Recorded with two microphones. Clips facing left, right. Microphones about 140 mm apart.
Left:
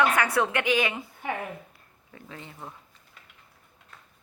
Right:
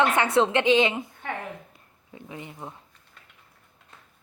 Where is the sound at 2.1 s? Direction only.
15° right (ahead or behind).